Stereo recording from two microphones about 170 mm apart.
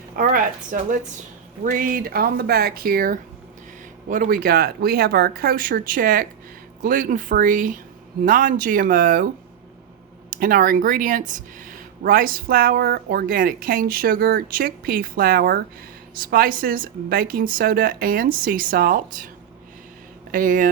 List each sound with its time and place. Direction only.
0.2 s speech: 55° right (ahead or behind)
20.3 s speech: 50° right (ahead or behind)